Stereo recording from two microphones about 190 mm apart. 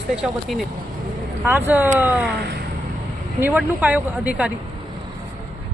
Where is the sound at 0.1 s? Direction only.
Centre (ahead or behind).